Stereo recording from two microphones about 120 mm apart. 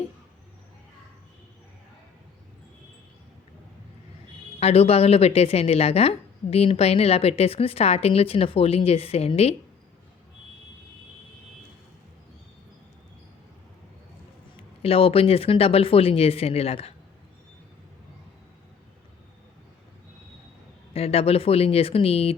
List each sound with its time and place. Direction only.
4.6 s a woman's voice: 55° left (ahead or behind)
14.5 s a woman's voice: 55° left (ahead or behind)
20.9 s a woman's voice: 55° left (ahead or behind)